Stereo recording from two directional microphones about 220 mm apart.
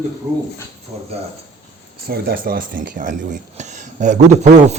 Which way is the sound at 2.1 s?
45° right (ahead or behind).